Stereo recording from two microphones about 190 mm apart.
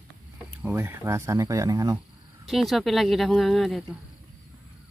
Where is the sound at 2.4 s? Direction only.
Centre (ahead or behind).